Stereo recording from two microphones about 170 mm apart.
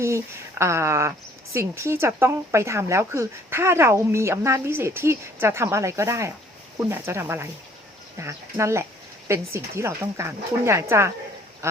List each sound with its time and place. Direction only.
0.6 s speech: 15° right (ahead or behind)
11.6 s duck: 15° right (ahead or behind)